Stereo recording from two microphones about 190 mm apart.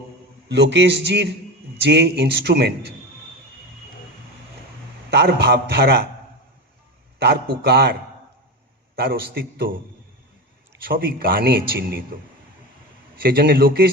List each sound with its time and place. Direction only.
0.4 s a man's voice: 65° right (ahead or behind)
5.1 s a man's voice: 60° right (ahead or behind)
7.2 s a man's voice: 60° right (ahead or behind)
9.0 s a man's voice: 55° right (ahead or behind)
10.8 s a man's voice: 50° right (ahead or behind)
13.2 s a man's voice: 55° right (ahead or behind)